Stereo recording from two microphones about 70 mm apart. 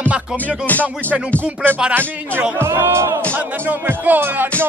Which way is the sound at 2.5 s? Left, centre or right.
Right.